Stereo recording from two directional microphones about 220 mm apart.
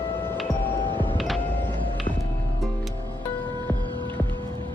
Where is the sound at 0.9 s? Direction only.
20° right (ahead or behind).